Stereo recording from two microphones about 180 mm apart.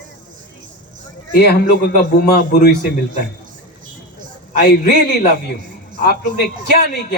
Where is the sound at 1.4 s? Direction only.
60° left (ahead or behind).